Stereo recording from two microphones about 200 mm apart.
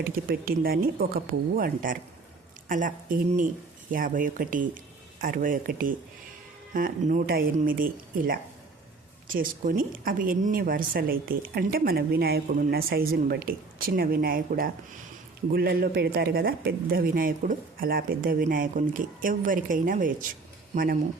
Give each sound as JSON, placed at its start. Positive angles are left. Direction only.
{"t": 0.0, "sound": "a woman's voice", "side_deg": -45}
{"t": 9.2, "sound": "a woman's voice", "side_deg": -45}